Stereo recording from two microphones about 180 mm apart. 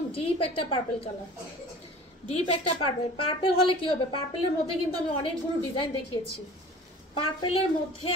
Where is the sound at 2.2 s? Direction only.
35° left (ahead or behind).